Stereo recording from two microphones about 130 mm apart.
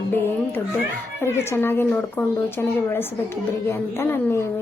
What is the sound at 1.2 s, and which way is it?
A woman's voice, 20° left (ahead or behind).